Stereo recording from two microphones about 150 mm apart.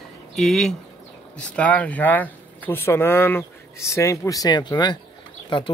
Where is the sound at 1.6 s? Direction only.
10° left (ahead or behind); by 5.7 s 30° left (ahead or behind).